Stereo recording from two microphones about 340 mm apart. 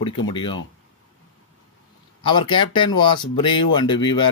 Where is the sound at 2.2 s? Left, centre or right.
Centre.